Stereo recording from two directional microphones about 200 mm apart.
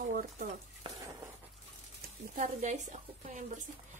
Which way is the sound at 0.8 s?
20° right (ahead or behind).